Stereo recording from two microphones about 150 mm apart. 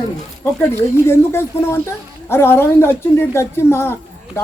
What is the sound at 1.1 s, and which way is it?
A woman's voice, 15° left (ahead or behind).